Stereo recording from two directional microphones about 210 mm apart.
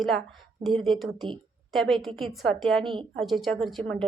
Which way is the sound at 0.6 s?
Centre (ahead or behind).